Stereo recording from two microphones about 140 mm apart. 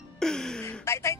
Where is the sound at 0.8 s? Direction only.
20° left (ahead or behind).